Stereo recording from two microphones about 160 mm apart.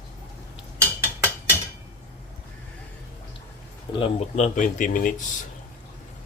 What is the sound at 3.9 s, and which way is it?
Speech, 35° left (ahead or behind).